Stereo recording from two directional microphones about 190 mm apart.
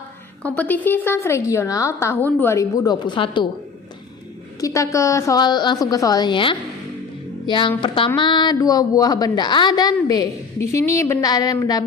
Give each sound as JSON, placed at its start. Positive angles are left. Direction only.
{"t": 0.4, "sound": "a woman's voice", "side_deg": 10}
{"t": 4.6, "sound": "speech", "side_deg": 15}